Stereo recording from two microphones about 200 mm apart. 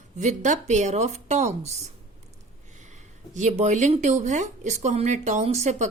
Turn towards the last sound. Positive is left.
turn(degrees=-35)  # may be behind; listen again after turning